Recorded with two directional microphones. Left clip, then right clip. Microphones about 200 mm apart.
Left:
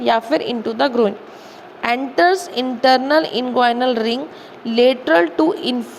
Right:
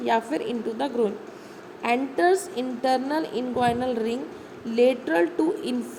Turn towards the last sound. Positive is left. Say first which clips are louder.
# left 8 dB
turn(degrees=15)  # may be behind; listen again after turning